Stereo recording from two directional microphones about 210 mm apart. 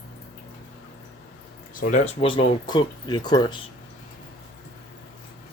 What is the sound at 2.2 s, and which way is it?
Speech, 20° left (ahead or behind).